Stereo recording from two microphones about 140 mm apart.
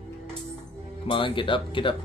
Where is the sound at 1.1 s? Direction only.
35° left (ahead or behind).